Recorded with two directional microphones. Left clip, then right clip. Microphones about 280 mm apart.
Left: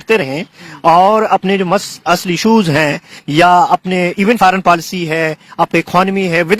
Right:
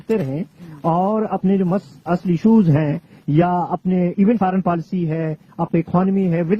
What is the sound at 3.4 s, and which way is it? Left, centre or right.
A man's voice, centre.